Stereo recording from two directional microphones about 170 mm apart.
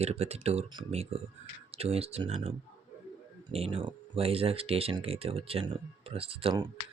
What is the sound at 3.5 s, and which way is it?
Speech, 35° right (ahead or behind).